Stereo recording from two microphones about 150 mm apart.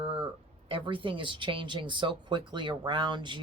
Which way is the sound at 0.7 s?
35° right (ahead or behind).